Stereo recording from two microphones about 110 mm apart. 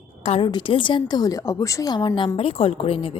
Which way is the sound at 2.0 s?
45° left (ahead or behind).